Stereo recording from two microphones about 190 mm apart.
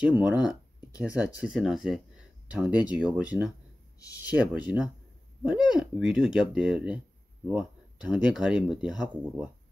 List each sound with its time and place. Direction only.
0.0 s speech: 5° right (ahead or behind)
4.0 s speech: 15° left (ahead or behind)
4.4 s speech: 5° right (ahead or behind)